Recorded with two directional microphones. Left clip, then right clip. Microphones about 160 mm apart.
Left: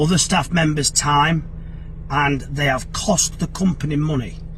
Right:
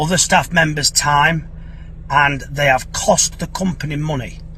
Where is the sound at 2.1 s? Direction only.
10° right (ahead or behind).